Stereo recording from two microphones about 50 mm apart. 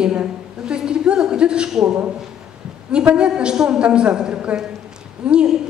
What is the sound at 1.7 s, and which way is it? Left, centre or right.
A man's voice, centre.